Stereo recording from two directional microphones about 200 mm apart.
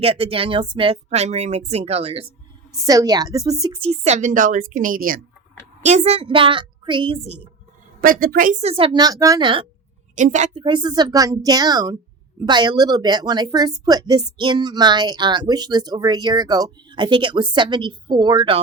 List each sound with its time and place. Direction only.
0.0 s a woman's voice: 30° right (ahead or behind)
2.8 s a woman's voice: 15° right (ahead or behind); by 5.2 s 45° right (ahead or behind)
5.8 s a woman's voice: 35° right (ahead or behind)
8.0 s a woman's voice: 45° right (ahead or behind)
8.7 s a woman's voice: 25° right (ahead or behind)
10.2 s a woman's voice: 35° right (ahead or behind)